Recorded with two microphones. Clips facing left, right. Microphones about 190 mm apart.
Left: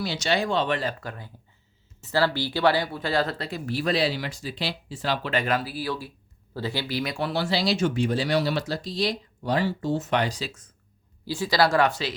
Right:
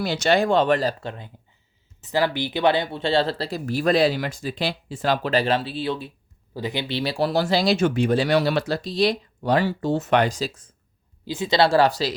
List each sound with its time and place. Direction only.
0.0 s speech: 55° right (ahead or behind)
1.0 s speech: 20° right (ahead or behind)
11.3 s speech: 20° right (ahead or behind)